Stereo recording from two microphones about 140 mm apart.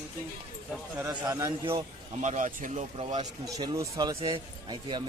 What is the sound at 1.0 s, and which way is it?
Speech, 15° right (ahead or behind).